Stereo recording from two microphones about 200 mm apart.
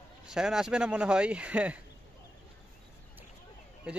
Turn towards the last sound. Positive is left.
turn(degrees=-5)  # may be behind; listen again after turning